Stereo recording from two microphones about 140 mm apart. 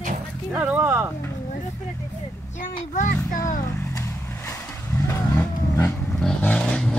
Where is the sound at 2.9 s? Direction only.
70° left (ahead or behind).